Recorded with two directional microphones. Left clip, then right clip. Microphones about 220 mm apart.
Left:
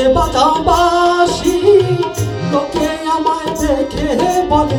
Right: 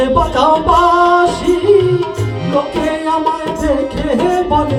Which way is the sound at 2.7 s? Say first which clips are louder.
Right 1 dB; 55° left (ahead or behind).